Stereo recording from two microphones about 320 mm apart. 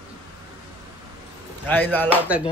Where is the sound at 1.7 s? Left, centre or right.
Centre.